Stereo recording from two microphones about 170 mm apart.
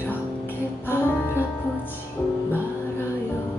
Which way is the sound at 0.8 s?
15° left (ahead or behind).